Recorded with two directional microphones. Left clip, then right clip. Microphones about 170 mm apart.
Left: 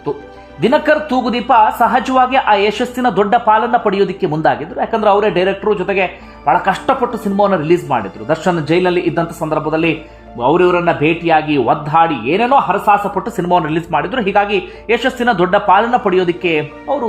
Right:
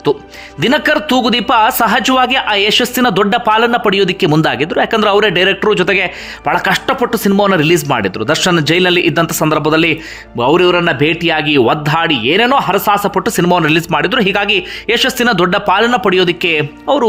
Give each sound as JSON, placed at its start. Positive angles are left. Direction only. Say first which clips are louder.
{"t": 0.6, "sound": "a man's voice", "louder": "even", "side_deg": -15}
{"t": 6.7, "sound": "a man's voice", "louder": "right 1 dB", "side_deg": -15}
{"t": 10.3, "sound": "a man's voice", "louder": "right 2 dB", "side_deg": -15}